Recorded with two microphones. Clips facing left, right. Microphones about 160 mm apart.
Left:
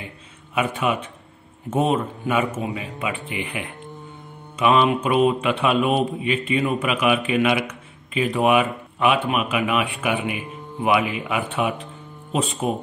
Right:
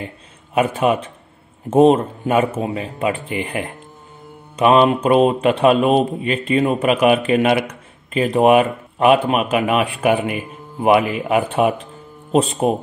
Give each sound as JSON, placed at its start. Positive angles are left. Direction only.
{"t": 0.6, "sound": "a man's voice", "side_deg": -40}